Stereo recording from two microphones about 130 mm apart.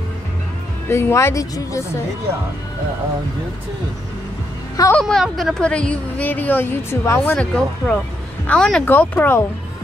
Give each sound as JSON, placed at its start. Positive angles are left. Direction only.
{"t": 0.8, "sound": "speech", "side_deg": 20}
{"t": 5.0, "sound": "speech", "side_deg": 0}
{"t": 7.3, "sound": "speech", "side_deg": 5}